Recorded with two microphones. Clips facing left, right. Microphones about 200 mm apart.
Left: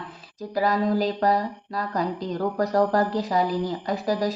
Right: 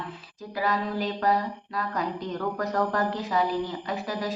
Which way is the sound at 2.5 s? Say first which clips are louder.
Left 7 dB; 35° left (ahead or behind).